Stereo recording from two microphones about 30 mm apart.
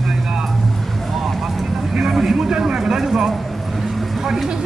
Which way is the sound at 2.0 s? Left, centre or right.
Centre.